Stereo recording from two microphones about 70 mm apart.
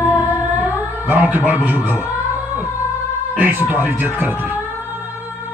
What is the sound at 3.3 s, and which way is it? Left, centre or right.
Speech, right.